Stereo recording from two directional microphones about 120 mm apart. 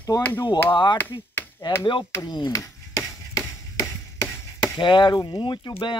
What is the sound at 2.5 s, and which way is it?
Chop, 25° left (ahead or behind).